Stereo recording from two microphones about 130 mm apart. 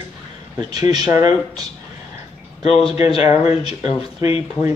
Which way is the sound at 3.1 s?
50° left (ahead or behind).